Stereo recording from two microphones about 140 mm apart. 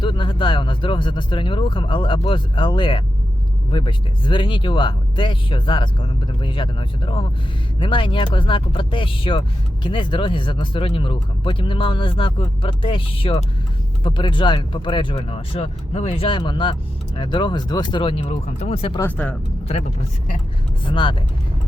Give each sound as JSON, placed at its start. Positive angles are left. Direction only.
{"t": 0.0, "sound": "speech", "side_deg": 35}
{"t": 18.9, "sound": "speech", "side_deg": 15}
{"t": 20.8, "sound": "speech", "side_deg": 35}